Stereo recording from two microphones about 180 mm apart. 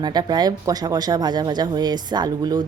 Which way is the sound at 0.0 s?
20° right (ahead or behind).